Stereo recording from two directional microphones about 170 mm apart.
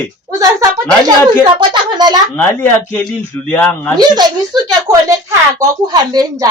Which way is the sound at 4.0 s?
25° right (ahead or behind).